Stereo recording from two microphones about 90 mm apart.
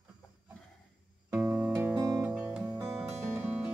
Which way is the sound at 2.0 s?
35° right (ahead or behind).